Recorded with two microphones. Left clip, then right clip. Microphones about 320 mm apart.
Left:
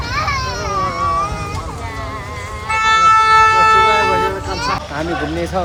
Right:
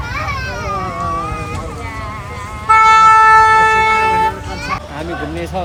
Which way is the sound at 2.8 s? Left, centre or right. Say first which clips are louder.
Right 3 dB; centre.